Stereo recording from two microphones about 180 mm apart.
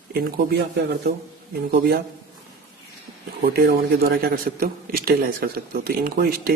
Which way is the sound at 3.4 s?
60° right (ahead or behind).